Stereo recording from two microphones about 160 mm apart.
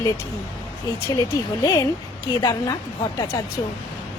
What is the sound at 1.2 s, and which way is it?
Speech, 20° left (ahead or behind).